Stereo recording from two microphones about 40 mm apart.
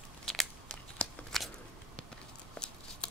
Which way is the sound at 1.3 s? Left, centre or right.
Centre.